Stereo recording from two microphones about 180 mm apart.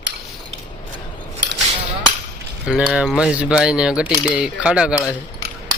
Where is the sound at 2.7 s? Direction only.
5° right (ahead or behind).